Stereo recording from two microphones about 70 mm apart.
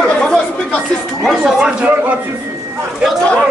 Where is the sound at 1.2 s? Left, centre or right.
Centre.